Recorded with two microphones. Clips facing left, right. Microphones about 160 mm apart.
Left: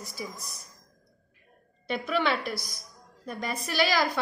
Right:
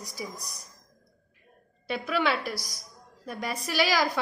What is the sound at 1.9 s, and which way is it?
A woman's voice, 5° right (ahead or behind).